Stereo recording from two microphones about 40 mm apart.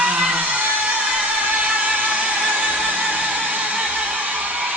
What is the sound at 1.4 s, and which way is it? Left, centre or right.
Music, right.